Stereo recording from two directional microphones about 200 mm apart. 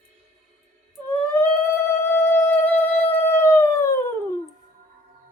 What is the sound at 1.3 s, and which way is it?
Music, 10° left (ahead or behind).